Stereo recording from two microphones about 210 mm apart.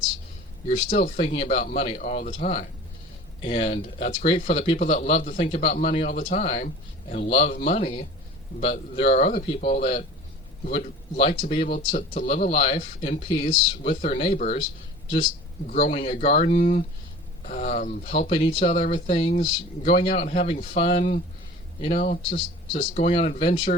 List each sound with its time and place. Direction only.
0.9 s speech: 35° left (ahead or behind)
11.9 s speech: 40° left (ahead or behind)